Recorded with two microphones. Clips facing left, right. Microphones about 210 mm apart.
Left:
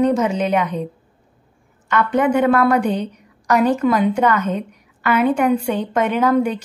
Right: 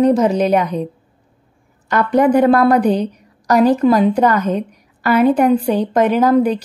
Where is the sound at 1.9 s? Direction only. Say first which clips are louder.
Right 4 dB; 35° right (ahead or behind).